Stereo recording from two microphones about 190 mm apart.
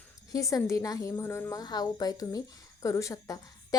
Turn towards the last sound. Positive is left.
turn(degrees=20)  # may be behind; listen again after turning